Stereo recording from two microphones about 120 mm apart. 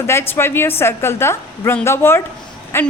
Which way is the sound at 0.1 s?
20° left (ahead or behind).